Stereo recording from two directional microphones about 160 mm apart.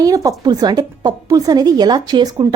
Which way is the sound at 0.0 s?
20° right (ahead or behind).